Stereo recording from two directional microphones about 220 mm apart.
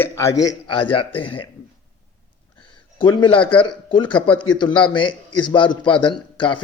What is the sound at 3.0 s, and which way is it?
A man's voice, 20° left (ahead or behind).